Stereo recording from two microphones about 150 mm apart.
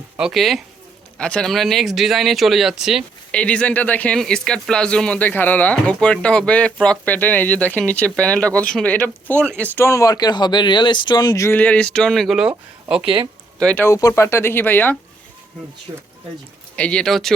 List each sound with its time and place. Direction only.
0.2 s speech: centre (ahead or behind)
3.3 s speech: 5° left (ahead or behind); by 11.5 s 25° left (ahead or behind)
11.5 s speech: 10° left (ahead or behind)
13.6 s speech: 5° left (ahead or behind)
13.8 s speech: 20° left (ahead or behind)
15.9 s speech: 20° right (ahead or behind)
16.7 s speech: 5° left (ahead or behind)